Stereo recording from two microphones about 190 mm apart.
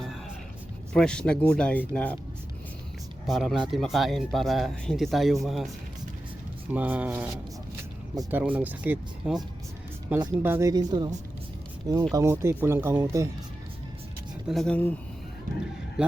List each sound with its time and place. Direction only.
0.9 s speech: 5° left (ahead or behind)
3.2 s speech: centre (ahead or behind); by 11.1 s 20° right (ahead or behind)
12.1 s speech: 15° right (ahead or behind)
14.4 s speech: centre (ahead or behind)
16.0 s speech: 5° right (ahead or behind)